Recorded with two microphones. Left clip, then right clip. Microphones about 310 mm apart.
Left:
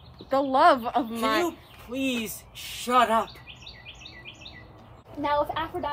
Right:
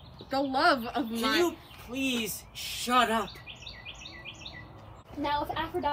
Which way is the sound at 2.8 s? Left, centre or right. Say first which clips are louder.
Left 4 dB; centre.